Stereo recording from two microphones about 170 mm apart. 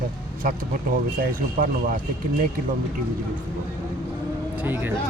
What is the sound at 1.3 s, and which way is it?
Speech, 55° right (ahead or behind).